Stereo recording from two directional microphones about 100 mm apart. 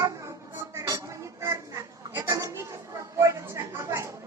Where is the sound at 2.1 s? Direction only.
35° right (ahead or behind).